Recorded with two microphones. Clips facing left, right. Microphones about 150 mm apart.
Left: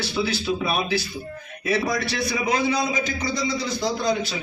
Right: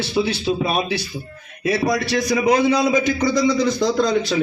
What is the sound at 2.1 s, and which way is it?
A man's voice, 45° right (ahead or behind).